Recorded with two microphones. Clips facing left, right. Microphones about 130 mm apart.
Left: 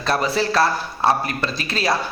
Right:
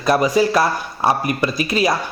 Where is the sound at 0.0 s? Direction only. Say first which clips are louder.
Right 5 dB; 10° right (ahead or behind).